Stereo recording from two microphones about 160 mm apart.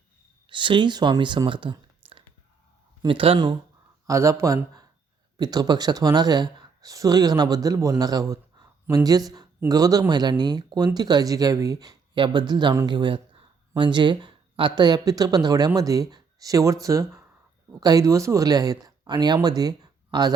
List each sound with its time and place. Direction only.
0.4 s speech: 30° right (ahead or behind)
4.0 s speech: 20° right (ahead or behind)